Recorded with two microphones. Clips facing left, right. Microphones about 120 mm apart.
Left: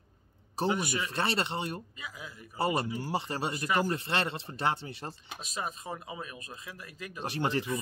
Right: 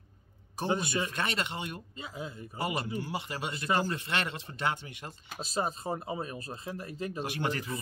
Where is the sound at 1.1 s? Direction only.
30° left (ahead or behind).